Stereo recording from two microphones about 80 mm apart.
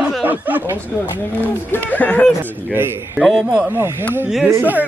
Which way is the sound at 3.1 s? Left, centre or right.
Centre.